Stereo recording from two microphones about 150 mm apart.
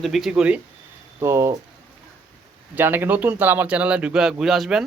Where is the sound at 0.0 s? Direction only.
Centre (ahead or behind).